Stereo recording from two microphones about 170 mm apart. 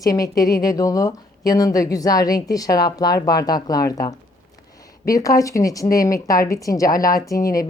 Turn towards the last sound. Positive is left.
turn(degrees=20)  # may be behind; listen again after turning